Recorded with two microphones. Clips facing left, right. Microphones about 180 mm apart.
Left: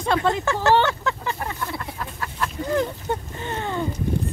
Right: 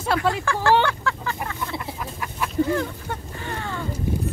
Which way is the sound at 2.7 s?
20° left (ahead or behind).